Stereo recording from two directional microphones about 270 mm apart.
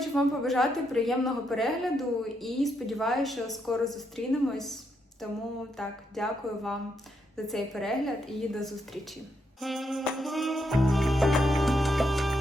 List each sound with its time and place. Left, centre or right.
0.0 s a woman's voice: centre
9.6 s music: centre